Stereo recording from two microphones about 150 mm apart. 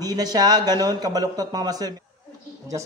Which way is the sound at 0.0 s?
25° right (ahead or behind).